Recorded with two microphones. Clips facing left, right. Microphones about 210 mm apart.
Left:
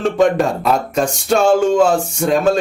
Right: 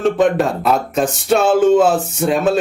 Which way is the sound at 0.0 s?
Centre (ahead or behind).